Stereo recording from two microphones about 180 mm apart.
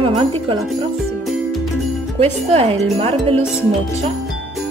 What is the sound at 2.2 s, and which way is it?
Speech, 35° right (ahead or behind).